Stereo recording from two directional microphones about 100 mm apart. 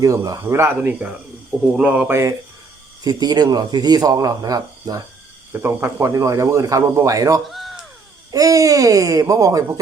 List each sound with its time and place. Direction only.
0.0 s speech: 35° right (ahead or behind)
3.0 s speech: 40° right (ahead or behind)
5.5 s speech: 25° right (ahead or behind)
7.4 s a sound: centre (ahead or behind)
8.3 s speech: 35° right (ahead or behind)